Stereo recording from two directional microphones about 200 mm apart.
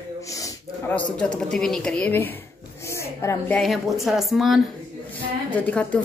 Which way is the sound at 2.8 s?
15° left (ahead or behind).